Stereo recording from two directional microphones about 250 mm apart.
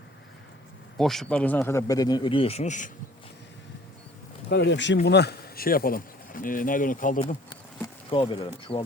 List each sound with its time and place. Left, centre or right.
0.9 s speech: centre; by 2.9 s left
4.4 s speech: left
8.1 s speech: centre